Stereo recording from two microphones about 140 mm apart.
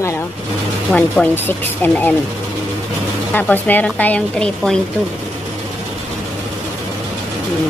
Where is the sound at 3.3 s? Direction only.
10° left (ahead or behind).